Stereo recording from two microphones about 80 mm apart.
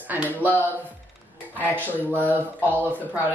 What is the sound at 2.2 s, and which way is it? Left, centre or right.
A woman's voice, right.